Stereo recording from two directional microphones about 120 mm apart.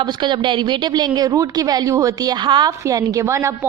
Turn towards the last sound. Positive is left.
turn(degrees=-25)  # may be behind; listen again after turning